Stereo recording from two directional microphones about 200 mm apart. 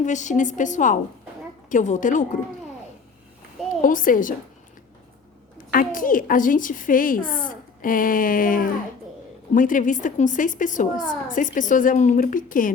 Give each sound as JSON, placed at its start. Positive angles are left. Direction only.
{"t": 0.0, "sound": "a woman's voice", "side_deg": 35}
{"t": 3.8, "sound": "a woman's voice", "side_deg": 40}
{"t": 5.7, "sound": "a woman's voice", "side_deg": 45}